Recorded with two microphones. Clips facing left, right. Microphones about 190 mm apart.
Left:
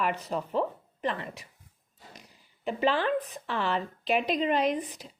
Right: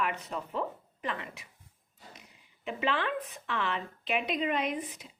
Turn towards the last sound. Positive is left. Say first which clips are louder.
# left 5 dB
turn(degrees=35)  # may be behind; listen again after turning